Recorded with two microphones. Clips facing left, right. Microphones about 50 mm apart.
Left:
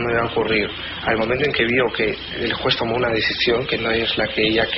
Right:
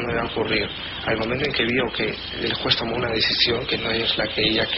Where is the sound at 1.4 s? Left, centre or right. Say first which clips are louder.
Left 3 dB; left.